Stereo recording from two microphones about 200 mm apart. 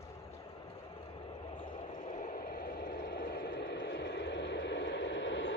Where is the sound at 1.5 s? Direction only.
25° left (ahead or behind).